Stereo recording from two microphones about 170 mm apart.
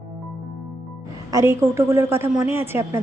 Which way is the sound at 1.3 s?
15° right (ahead or behind).